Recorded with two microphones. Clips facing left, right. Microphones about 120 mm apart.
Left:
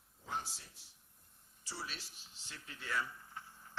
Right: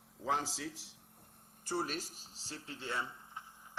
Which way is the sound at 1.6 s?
50° right (ahead or behind).